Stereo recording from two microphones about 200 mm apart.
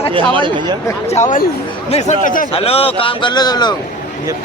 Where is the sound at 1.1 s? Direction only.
40° left (ahead or behind).